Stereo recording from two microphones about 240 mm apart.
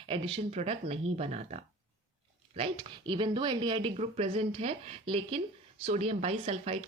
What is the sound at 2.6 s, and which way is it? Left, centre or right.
Speech, right.